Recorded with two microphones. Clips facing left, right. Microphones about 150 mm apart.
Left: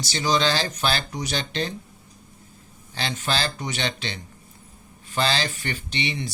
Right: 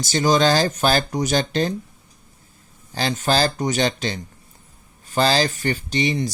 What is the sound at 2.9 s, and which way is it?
Speech, 40° right (ahead or behind).